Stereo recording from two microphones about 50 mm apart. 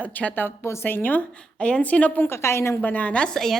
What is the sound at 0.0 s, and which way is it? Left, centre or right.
Speech, left.